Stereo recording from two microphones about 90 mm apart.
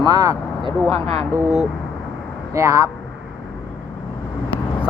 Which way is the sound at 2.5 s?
35° right (ahead or behind).